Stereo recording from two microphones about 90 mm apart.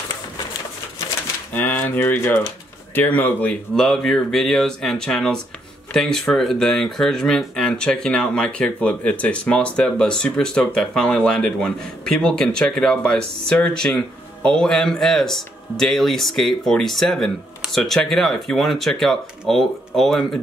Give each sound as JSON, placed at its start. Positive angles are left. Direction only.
{"t": 1.5, "sound": "speech", "side_deg": 20}
{"t": 3.7, "sound": "speech", "side_deg": 5}